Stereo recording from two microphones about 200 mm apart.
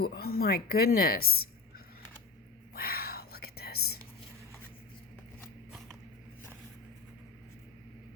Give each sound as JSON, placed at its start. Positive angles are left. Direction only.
{"t": 0.0, "sound": "speech", "side_deg": 50}
{"t": 2.7, "sound": "whispering", "side_deg": 50}